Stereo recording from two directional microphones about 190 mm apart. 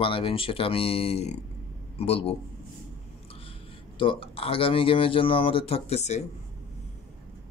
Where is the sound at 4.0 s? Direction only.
30° left (ahead or behind).